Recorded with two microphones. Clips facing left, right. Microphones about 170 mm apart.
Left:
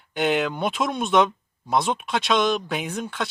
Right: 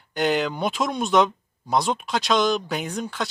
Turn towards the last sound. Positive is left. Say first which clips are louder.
# even
turn(degrees=0)  # may be behind; listen again after turning